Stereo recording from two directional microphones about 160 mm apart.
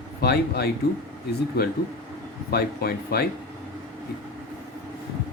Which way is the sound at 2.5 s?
80° left.